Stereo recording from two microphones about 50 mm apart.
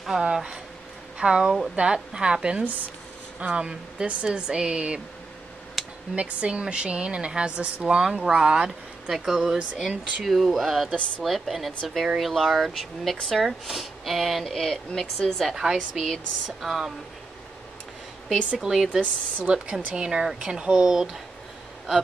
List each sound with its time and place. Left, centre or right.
0.2 s a woman's voice: centre
5.8 s a sound: centre
6.1 s a woman's voice: right; by 15.4 s centre
15.5 s speech: centre
18.5 s speech: centre
18.9 s speech: right; by 21.2 s centre